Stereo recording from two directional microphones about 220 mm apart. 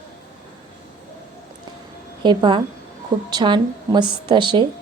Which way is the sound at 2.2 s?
20° right (ahead or behind).